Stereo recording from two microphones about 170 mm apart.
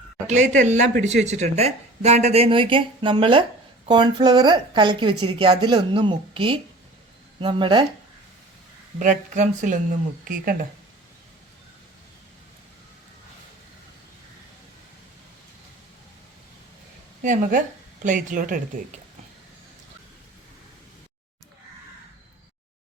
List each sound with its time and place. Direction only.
0.3 s speech: 45° right (ahead or behind); by 7.9 s 30° right (ahead or behind)
9.0 s speech: 45° right (ahead or behind)
17.2 s speech: 50° right (ahead or behind)